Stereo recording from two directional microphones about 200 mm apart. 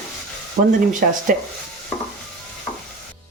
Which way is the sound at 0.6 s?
35° right (ahead or behind).